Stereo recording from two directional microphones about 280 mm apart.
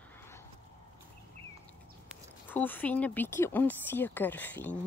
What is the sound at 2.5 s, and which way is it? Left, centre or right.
Speech, centre.